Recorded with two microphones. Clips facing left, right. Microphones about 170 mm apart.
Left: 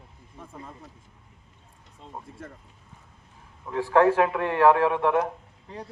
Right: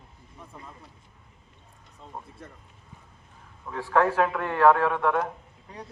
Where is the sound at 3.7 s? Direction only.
20° left (ahead or behind).